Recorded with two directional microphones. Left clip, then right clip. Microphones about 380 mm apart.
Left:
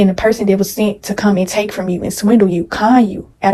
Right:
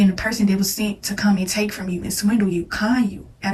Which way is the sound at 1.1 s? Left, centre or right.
Centre.